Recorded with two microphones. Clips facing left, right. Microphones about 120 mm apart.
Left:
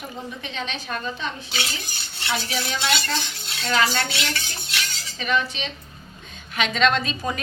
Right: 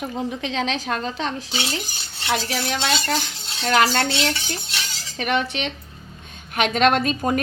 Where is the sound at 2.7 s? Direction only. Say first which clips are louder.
Right 2 dB; 35° right (ahead or behind).